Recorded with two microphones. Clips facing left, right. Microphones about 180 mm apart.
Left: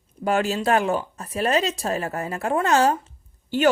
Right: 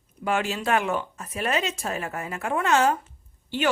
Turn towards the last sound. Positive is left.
turn(degrees=40)  # may be behind; listen again after turning